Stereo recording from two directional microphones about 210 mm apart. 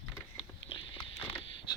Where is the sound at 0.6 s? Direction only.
25° left (ahead or behind).